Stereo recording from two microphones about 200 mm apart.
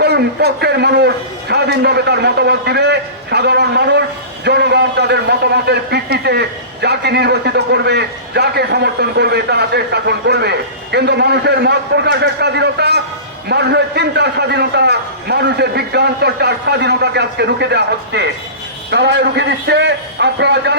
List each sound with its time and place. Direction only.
0.0 s a man's voice: 55° right (ahead or behind)